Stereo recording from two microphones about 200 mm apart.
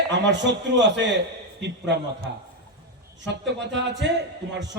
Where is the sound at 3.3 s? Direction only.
60° right (ahead or behind).